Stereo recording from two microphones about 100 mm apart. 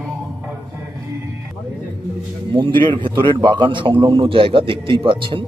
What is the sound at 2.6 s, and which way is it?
A man's voice, 55° right (ahead or behind).